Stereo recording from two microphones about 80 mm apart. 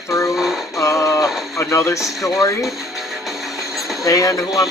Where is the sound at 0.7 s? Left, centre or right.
Left.